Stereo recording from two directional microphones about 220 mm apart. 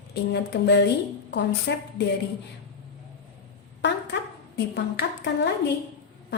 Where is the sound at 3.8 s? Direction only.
50° left (ahead or behind).